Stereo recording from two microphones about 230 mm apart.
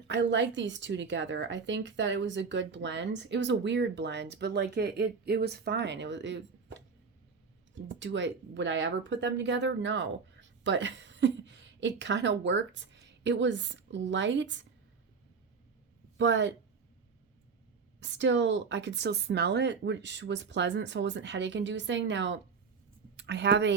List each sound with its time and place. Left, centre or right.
0.1 s speech: right
7.9 s a woman's voice: right
16.1 s speech: right
18.0 s speech: right